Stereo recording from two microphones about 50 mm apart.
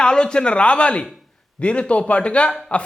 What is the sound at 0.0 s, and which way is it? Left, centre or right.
A man's voice, centre.